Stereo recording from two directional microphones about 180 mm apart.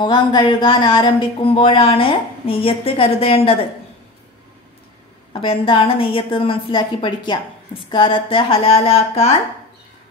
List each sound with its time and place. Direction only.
0.0 s speech: 25° left (ahead or behind)
5.3 s a woman's voice: 30° left (ahead or behind)